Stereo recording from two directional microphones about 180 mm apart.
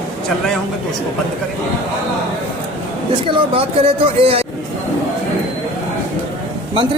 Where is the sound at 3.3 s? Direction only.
30° right (ahead or behind).